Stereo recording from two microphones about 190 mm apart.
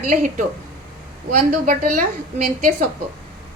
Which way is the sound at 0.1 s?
45° right (ahead or behind).